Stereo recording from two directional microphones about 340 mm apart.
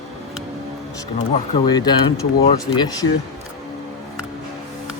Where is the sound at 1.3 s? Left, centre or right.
Centre.